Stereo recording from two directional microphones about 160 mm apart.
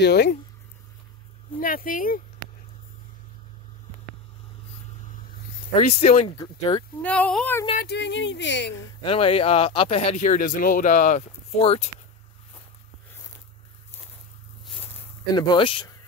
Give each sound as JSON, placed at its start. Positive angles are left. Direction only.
{"t": 0.0, "sound": "speech", "side_deg": 90}
{"t": 1.6, "sound": "speech", "side_deg": 60}
{"t": 5.7, "sound": "speech", "side_deg": 45}
{"t": 6.3, "sound": "speech", "side_deg": 25}
{"t": 7.0, "sound": "speech", "side_deg": 10}
{"t": 7.7, "sound": "speech", "side_deg": 85}
{"t": 9.0, "sound": "speech", "side_deg": 35}
{"t": 15.3, "sound": "speech", "side_deg": 30}